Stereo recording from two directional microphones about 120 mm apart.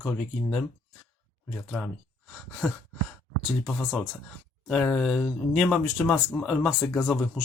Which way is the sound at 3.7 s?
5° left (ahead or behind).